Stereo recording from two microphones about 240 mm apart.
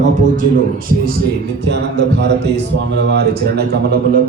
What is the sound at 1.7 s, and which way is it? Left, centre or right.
A man's voice, right.